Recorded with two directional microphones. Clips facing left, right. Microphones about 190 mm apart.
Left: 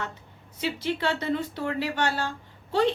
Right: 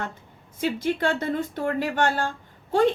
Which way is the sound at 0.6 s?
50° right (ahead or behind).